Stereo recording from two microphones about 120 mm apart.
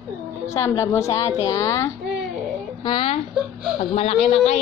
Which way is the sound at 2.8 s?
45° left (ahead or behind).